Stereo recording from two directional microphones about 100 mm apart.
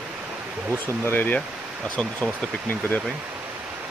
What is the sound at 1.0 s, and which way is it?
Speech, 20° left (ahead or behind).